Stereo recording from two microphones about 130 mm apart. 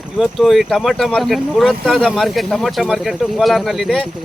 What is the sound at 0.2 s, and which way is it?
Speech, centre (ahead or behind).